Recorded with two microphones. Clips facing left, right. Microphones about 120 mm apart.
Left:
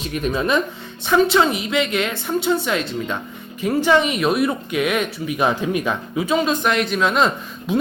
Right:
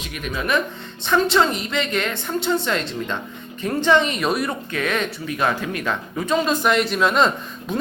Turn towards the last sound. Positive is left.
turn(degrees=0)  # may be behind; listen again after turning